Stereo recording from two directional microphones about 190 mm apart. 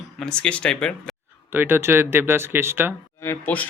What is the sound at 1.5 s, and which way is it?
Speech, 10° right (ahead or behind).